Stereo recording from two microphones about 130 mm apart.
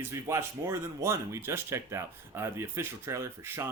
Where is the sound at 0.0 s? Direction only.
20° right (ahead or behind).